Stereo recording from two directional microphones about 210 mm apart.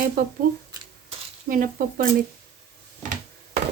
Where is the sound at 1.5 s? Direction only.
40° right (ahead or behind).